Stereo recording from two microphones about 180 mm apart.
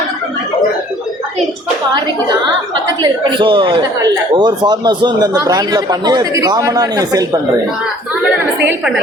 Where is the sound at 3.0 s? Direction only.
25° right (ahead or behind).